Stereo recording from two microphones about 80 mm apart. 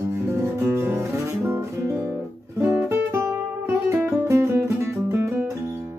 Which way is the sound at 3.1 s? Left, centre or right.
Right.